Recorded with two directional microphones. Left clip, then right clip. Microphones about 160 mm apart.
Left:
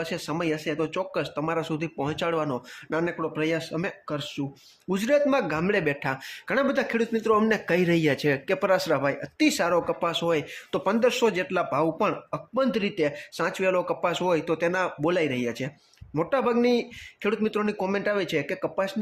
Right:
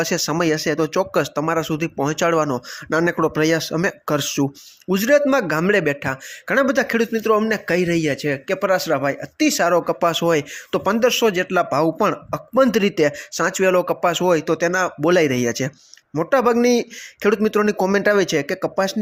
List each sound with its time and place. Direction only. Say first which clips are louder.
0.0 s speech: right 9 dB; 45° right (ahead or behind)
3.0 s speech: right 10 dB; 45° right (ahead or behind)
4.1 s speech: right 11 dB; 65° right (ahead or behind)
4.9 s speech: right 7 dB; 30° right (ahead or behind)
12.5 s speech: right 9 dB; 45° right (ahead or behind)